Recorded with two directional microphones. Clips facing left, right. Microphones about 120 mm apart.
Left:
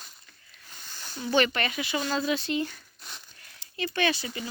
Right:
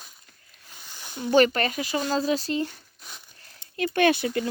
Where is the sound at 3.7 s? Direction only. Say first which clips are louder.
Right 6 dB; 50° right (ahead or behind).